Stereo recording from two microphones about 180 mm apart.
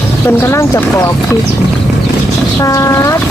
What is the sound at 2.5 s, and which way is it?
Speech, 15° left (ahead or behind).